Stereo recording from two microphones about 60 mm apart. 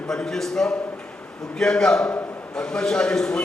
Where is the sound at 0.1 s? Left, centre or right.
Centre.